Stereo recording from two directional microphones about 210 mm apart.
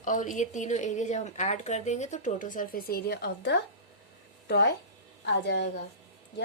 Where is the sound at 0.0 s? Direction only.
40° left (ahead or behind).